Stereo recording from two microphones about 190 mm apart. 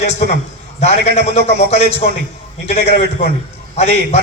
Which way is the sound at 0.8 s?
35° left (ahead or behind).